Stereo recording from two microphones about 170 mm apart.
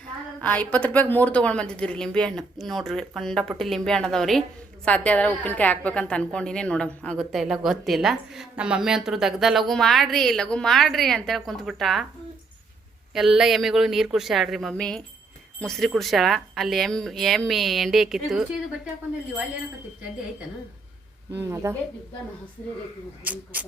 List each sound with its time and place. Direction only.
0.4 s a woman's voice: 10° left (ahead or behind)
13.1 s a woman's voice: centre (ahead or behind)
21.3 s speech: 15° right (ahead or behind)
23.2 s speech: 10° right (ahead or behind)